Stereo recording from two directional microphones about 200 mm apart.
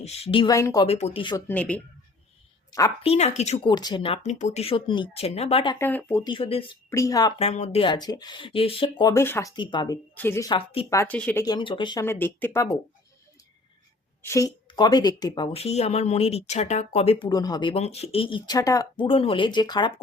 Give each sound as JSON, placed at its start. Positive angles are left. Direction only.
{"t": 0.0, "sound": "speech", "side_deg": 30}
{"t": 0.5, "sound": "speech", "side_deg": 15}
{"t": 0.9, "sound": "speech", "side_deg": 30}
{"t": 1.5, "sound": "speech", "side_deg": 5}
{"t": 3.0, "sound": "speech", "side_deg": 30}
{"t": 5.8, "sound": "speech", "side_deg": 10}
{"t": 6.2, "sound": "speech", "side_deg": 25}
{"t": 6.9, "sound": "speech", "side_deg": 15}
{"t": 7.3, "sound": "speech", "side_deg": 35}
{"t": 11.4, "sound": "speech", "side_deg": 20}
{"t": 12.0, "sound": "speech", "side_deg": 10}
{"t": 14.2, "sound": "a woman's voice", "side_deg": 15}
{"t": 15.5, "sound": "speech", "side_deg": 30}